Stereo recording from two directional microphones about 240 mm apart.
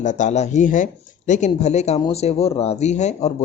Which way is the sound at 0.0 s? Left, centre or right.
Left.